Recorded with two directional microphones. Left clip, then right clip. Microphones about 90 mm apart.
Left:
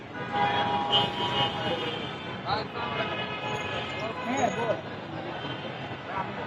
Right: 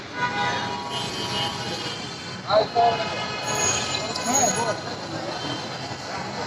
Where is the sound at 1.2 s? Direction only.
30° left (ahead or behind).